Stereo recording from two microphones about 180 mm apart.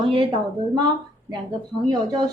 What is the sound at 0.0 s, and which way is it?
Speech, 25° right (ahead or behind).